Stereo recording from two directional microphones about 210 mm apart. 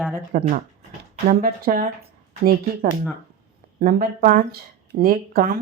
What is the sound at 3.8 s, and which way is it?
Speech, 40° right (ahead or behind).